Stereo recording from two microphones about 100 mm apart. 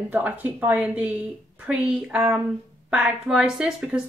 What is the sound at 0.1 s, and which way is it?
Speech, 20° right (ahead or behind).